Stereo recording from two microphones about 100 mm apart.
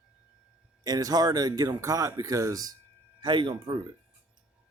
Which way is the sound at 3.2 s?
50° right (ahead or behind).